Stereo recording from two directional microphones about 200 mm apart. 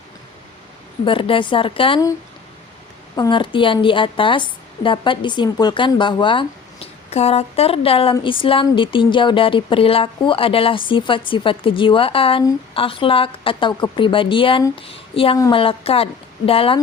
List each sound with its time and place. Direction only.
1.0 s a woman's voice: 25° left (ahead or behind)
3.2 s a woman's voice: 25° left (ahead or behind)